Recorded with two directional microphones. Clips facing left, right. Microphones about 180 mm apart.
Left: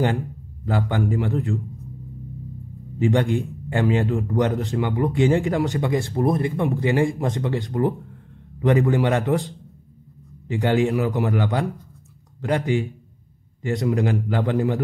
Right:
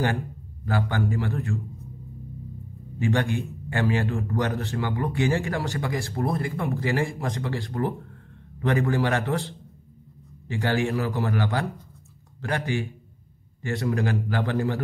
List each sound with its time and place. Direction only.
0.7 s speech: 20° left (ahead or behind)
3.0 s speech: 20° left (ahead or behind)